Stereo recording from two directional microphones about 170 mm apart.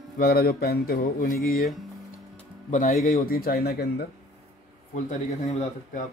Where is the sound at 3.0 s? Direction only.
60° left (ahead or behind).